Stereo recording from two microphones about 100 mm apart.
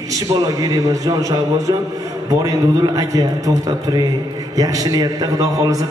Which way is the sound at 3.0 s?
35° right (ahead or behind).